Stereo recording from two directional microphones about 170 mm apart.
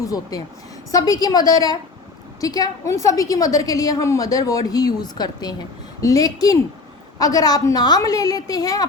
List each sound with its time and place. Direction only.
0.0 s a woman's voice: 20° left (ahead or behind)